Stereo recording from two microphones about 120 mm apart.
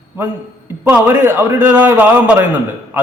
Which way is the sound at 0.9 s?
20° right (ahead or behind).